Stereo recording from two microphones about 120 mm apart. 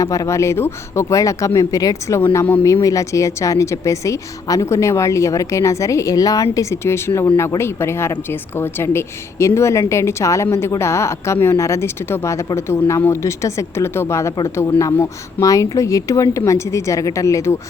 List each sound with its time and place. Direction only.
0.0 s a woman's voice: 25° left (ahead or behind)